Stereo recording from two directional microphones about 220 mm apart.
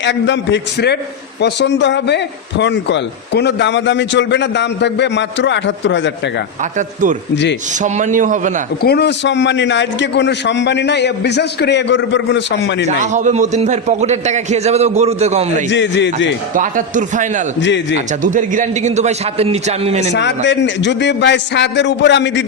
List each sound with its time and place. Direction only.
0.0 s speech: 55° left (ahead or behind)
6.7 s a man's voice: 35° right (ahead or behind)
8.8 s speech: 45° left (ahead or behind)
13.0 s a man's voice: 35° right (ahead or behind)
15.7 s speech: 55° left (ahead or behind)
16.6 s a man's voice: 35° right (ahead or behind)
20.1 s speech: 55° left (ahead or behind)